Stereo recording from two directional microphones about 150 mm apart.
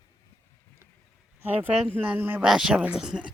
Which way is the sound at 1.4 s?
15° right (ahead or behind).